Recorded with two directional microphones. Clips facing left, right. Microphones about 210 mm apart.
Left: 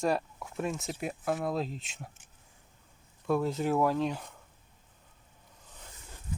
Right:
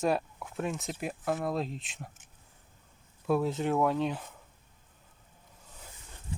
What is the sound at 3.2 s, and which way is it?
Speech, centre (ahead or behind).